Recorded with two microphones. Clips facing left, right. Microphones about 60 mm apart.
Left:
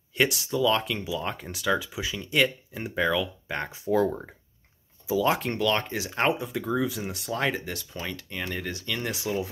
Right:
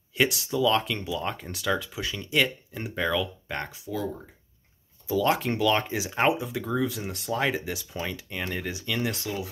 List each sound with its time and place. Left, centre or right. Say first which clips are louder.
0.2 s speech: even; centre
3.8 s speech: left 12 dB; left
5.0 s speech: even; centre
9.2 s speech: left 3 dB; left